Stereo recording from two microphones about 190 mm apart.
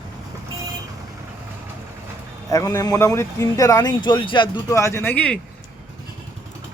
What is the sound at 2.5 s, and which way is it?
A man's voice, 15° left (ahead or behind).